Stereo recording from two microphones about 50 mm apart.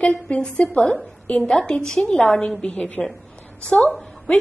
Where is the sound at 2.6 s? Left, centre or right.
Left.